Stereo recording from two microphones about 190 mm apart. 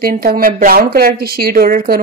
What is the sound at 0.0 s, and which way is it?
A woman's voice, 50° right (ahead or behind).